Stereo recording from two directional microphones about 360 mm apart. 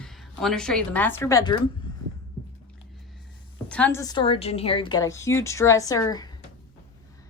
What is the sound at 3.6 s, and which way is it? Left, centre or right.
A woman's voice, centre.